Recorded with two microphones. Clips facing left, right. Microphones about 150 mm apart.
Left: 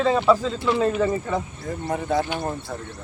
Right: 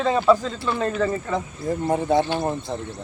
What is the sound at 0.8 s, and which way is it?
Speech, 10° left (ahead or behind).